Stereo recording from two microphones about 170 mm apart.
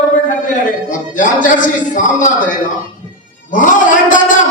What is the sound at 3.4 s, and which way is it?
Speech, 50° left (ahead or behind).